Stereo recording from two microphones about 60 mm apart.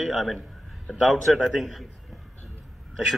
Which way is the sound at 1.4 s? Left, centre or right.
Centre.